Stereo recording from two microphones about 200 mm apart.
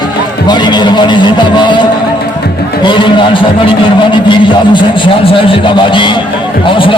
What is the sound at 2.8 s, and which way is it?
A man's voice, 25° left (ahead or behind).